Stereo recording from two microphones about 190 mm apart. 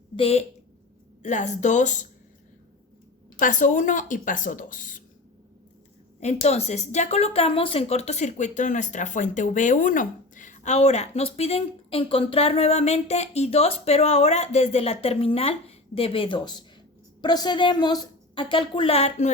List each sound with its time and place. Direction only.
0.2 s speech: 30° left (ahead or behind)
3.3 s speech: 40° left (ahead or behind)
6.1 s a woman's voice: 35° left (ahead or behind)